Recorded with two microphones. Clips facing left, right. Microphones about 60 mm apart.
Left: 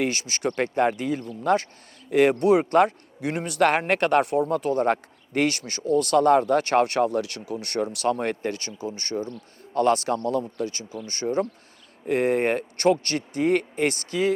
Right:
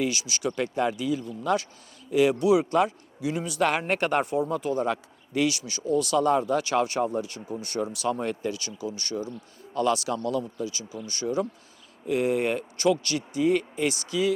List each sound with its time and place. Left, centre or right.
0.0 s speech: left